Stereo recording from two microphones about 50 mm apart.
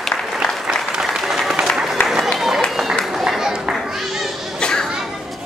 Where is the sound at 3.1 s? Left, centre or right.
Centre.